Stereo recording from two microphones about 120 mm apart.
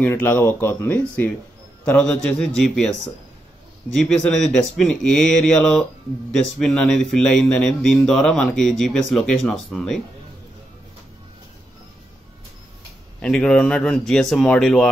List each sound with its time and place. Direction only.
0.0 s speech: 15° left (ahead or behind)
4.0 s speech: 5° left (ahead or behind)
13.2 s speech: 5° left (ahead or behind)